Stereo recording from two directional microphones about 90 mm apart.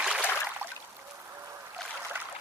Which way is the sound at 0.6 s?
25° right (ahead or behind).